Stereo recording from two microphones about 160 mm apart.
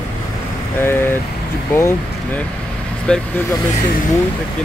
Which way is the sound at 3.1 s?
5° left (ahead or behind).